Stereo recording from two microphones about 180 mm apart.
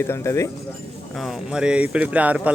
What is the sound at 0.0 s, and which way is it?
Speech, 15° left (ahead or behind).